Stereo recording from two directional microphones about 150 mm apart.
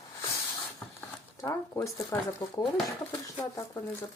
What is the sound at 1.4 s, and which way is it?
Speech, 15° left (ahead or behind).